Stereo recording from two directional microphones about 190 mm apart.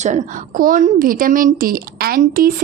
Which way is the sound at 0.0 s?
40° right (ahead or behind).